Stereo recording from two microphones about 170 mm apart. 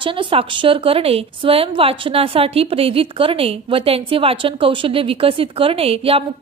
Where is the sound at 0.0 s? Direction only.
30° right (ahead or behind).